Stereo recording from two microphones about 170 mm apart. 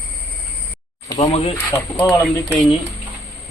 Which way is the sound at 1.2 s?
35° left (ahead or behind).